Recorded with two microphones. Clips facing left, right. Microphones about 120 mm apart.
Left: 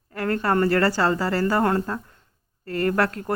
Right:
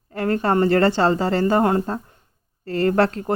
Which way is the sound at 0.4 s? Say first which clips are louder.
Right 3 dB; 25° right (ahead or behind).